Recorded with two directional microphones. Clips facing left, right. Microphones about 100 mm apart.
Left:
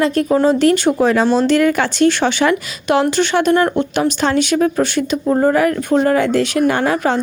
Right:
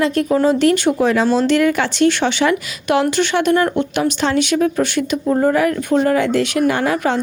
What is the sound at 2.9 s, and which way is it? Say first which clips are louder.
Speech: left 1 dB; 35° left (ahead or behind).